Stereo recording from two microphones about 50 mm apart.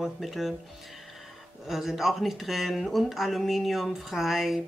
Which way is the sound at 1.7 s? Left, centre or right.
Centre.